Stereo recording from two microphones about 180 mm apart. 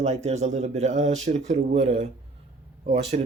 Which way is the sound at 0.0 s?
40° right (ahead or behind).